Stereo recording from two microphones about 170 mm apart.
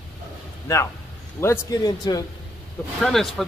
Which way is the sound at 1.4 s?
20° left (ahead or behind).